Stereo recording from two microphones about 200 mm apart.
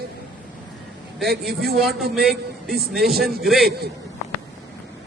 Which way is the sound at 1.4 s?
50° right (ahead or behind).